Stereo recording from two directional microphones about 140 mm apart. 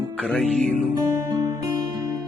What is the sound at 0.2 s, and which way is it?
Speech, 5° left (ahead or behind).